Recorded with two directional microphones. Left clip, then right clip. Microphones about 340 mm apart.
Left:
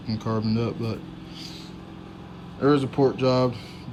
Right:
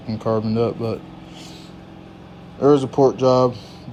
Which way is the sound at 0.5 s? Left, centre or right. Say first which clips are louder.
Right 8 dB; centre.